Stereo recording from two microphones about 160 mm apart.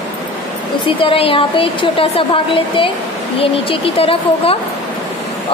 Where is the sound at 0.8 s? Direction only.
35° left (ahead or behind).